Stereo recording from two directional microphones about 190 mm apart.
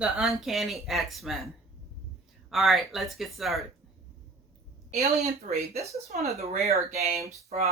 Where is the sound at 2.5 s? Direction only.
Centre (ahead or behind).